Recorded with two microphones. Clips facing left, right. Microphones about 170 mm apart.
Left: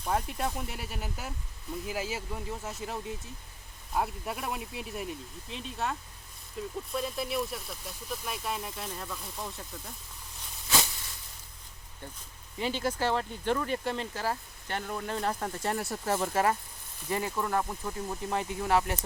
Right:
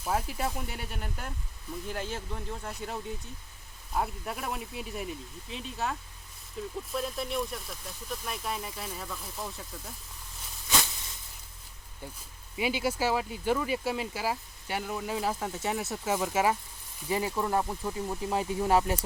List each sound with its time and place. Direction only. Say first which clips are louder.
0.0 s speech: even; 5° right (ahead or behind)
12.5 s speech: right 1 dB; 10° right (ahead or behind)